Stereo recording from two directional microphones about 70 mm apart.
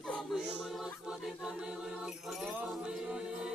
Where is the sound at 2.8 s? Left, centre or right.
Centre.